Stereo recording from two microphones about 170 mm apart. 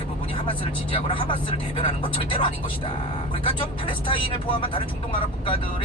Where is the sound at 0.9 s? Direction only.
30° left (ahead or behind).